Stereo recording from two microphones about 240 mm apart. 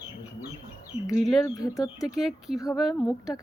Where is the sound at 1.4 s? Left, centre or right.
Centre.